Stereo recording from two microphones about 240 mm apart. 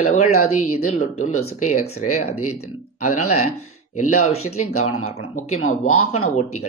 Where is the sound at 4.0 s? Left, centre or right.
Left.